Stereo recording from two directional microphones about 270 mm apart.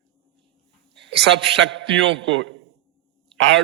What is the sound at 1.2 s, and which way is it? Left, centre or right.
A man's voice, right.